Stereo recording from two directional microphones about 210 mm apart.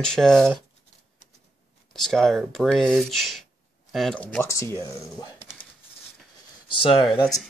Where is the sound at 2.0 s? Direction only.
Centre (ahead or behind).